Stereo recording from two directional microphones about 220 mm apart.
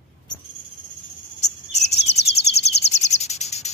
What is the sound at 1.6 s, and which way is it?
Bird vocalization, 30° left (ahead or behind).